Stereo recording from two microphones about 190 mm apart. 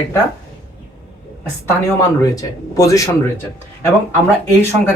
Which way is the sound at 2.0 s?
20° left (ahead or behind).